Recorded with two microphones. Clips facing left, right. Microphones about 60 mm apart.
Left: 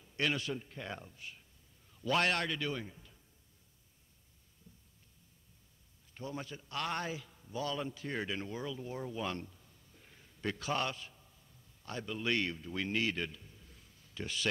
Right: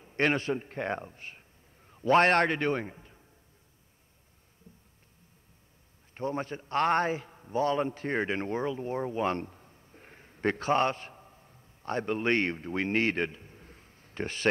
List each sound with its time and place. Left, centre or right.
0.0 s a man's voice: right
4.7 s a sound: right
6.1 s a man's voice: right